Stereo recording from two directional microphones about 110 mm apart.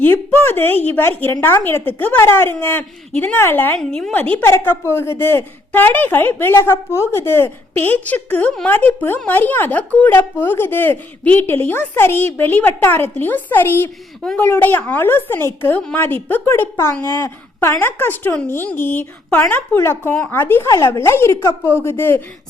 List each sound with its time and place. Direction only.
0.0 s a woman's voice: 20° left (ahead or behind)
3.8 s a woman's voice: 5° left (ahead or behind); by 22.2 s 20° left (ahead or behind)